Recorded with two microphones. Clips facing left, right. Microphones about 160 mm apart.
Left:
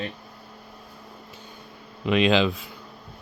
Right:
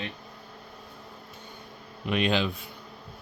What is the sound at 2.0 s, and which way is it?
Speech, 90° left.